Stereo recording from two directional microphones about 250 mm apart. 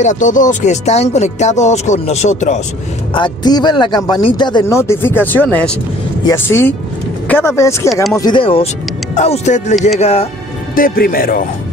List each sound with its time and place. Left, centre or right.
0.0 s speech: left
3.2 s speech: centre
7.9 s speech: centre
8.2 s speech: centre; by 11.4 s left